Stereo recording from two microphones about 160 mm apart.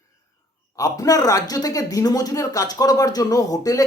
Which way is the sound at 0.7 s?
20° left (ahead or behind).